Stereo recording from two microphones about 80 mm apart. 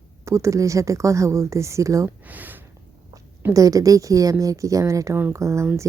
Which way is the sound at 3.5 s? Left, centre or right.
Right.